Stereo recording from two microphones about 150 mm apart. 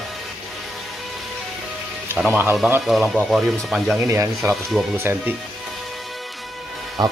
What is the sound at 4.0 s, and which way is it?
Speech, 20° right (ahead or behind).